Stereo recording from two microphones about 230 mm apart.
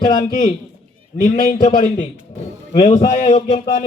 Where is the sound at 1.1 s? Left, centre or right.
Left.